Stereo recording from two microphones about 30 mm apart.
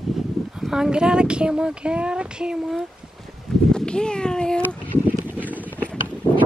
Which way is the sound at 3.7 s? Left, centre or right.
Left.